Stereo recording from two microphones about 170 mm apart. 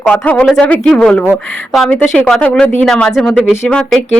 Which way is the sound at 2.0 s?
5° left (ahead or behind).